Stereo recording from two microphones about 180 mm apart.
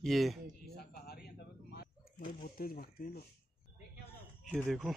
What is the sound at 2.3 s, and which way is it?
Speech, 60° left (ahead or behind).